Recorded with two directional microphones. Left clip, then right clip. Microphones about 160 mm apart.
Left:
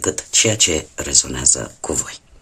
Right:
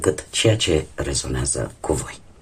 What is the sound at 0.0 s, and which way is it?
Speech, 25° left (ahead or behind).